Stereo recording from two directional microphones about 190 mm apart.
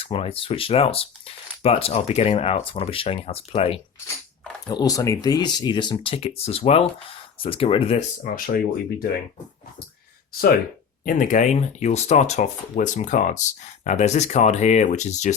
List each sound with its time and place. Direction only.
0.0 s speech: 30° left (ahead or behind)
4.7 s speech: 20° left (ahead or behind)
8.2 s speech: 50° left (ahead or behind)
11.0 s speech: 45° left (ahead or behind)